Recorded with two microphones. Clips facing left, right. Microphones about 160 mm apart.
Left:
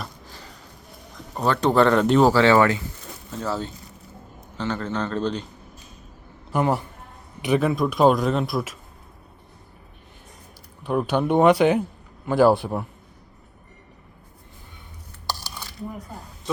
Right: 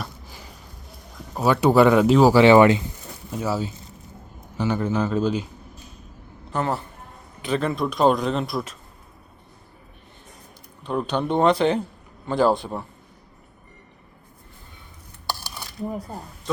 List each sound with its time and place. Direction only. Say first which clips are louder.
1.4 s speech: right 2 dB; 10° right (ahead or behind)
2.3 s speech: right 4 dB; 15° right (ahead or behind)
6.5 s speech: left 3 dB; 15° left (ahead or behind)
7.7 s speech: even; 5° left (ahead or behind)
10.8 s speech: left 2 dB; 10° left (ahead or behind)
15.3 s cutlery: right 1 dB; 10° right (ahead or behind)